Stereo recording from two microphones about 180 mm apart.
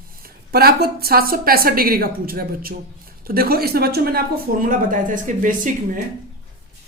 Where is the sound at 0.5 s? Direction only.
60° right (ahead or behind).